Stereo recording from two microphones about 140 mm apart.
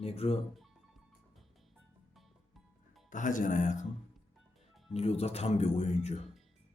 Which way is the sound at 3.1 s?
70° left (ahead or behind).